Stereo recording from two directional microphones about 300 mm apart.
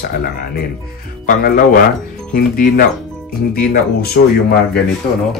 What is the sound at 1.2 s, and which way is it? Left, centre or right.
Speech, left.